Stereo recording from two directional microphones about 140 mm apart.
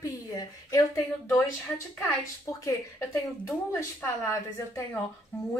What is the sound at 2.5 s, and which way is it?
A woman's voice, 25° left (ahead or behind).